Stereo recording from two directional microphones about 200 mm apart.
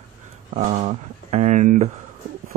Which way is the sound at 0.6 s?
35° right (ahead or behind).